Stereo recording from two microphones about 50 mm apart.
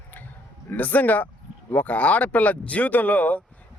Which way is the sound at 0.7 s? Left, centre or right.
Left.